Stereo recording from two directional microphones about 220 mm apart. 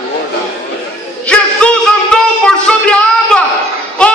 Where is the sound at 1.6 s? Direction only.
5° left (ahead or behind).